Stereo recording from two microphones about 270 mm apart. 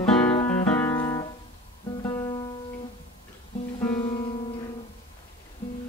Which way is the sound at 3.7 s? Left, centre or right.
Centre.